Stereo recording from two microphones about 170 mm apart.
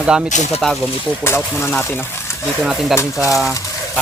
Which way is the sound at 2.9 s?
20° left (ahead or behind).